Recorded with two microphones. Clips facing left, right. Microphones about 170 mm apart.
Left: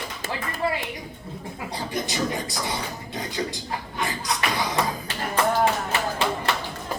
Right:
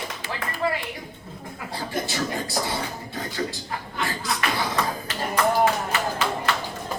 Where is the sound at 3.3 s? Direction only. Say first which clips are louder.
Even; 20° left (ahead or behind).